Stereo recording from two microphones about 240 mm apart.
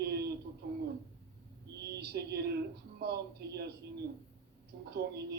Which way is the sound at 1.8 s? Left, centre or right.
Right.